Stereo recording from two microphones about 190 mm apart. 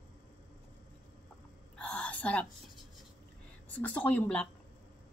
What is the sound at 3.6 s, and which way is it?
Speech, 10° left (ahead or behind).